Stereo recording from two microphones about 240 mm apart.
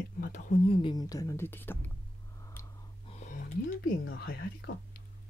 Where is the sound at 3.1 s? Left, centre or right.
Left.